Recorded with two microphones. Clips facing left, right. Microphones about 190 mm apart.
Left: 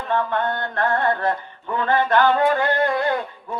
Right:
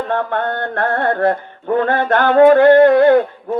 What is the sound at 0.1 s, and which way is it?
Music, 55° right (ahead or behind).